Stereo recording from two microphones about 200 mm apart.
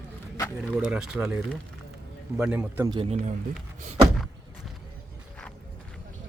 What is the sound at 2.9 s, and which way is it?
Speech, 30° right (ahead or behind).